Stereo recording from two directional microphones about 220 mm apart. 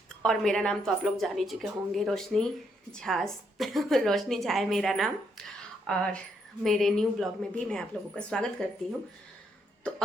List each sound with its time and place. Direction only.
0.2 s a woman's voice: centre (ahead or behind)
9.8 s a woman's voice: 5° left (ahead or behind)